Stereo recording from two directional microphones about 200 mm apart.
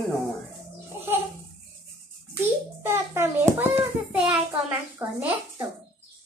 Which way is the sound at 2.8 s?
15° right (ahead or behind).